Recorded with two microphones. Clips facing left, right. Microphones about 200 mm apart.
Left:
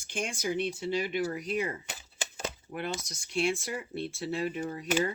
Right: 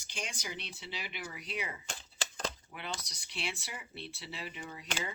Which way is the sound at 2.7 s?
45° left (ahead or behind).